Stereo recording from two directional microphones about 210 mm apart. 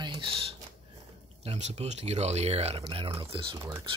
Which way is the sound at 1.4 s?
30° right (ahead or behind).